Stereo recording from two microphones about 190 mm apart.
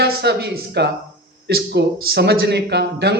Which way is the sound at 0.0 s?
60° right (ahead or behind).